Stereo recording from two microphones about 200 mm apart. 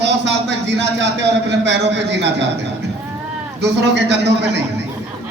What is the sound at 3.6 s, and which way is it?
A man's voice, 60° right (ahead or behind).